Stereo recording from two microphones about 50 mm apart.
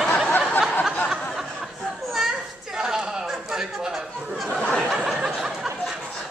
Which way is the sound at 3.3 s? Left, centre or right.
Centre.